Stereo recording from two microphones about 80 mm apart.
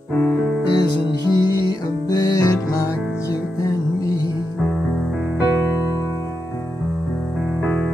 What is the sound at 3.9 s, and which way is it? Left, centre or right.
Music, left.